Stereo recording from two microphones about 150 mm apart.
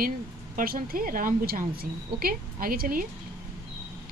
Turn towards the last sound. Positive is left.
turn(degrees=-70)  # may be behind; listen again after turning